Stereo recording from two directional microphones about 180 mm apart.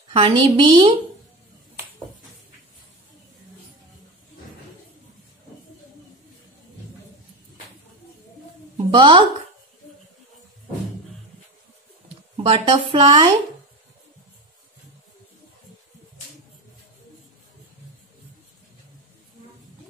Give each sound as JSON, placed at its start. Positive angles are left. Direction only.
{"t": 0.1, "sound": "speech", "side_deg": -30}
{"t": 8.7, "sound": "a sound", "side_deg": -30}
{"t": 12.4, "sound": "speech", "side_deg": -30}